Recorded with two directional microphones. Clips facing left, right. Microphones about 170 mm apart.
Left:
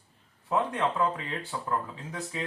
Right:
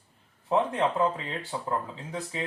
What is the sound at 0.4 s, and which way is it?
Speech, 25° right (ahead or behind).